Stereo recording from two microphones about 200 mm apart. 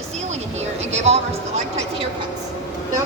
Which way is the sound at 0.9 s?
35° right (ahead or behind).